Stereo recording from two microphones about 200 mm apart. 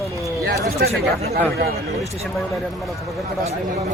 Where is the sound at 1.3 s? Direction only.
50° right (ahead or behind).